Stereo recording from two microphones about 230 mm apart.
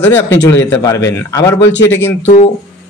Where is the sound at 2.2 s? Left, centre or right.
Left.